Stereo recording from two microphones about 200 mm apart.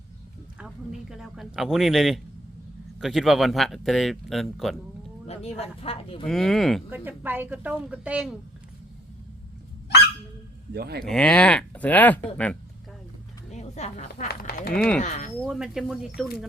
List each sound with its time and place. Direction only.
0.6 s speech: 5° right (ahead or behind)
5.2 s speech: 30° left (ahead or behind)
6.2 s a woman's voice: centre (ahead or behind)
10.8 s speech: 50° right (ahead or behind)
11.0 s speech: 5° left (ahead or behind)
13.5 s speech: 35° left (ahead or behind)
15.4 s speech: centre (ahead or behind)